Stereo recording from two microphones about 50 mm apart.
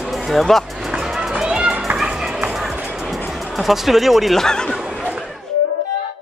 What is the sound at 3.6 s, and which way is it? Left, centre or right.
Speech, centre.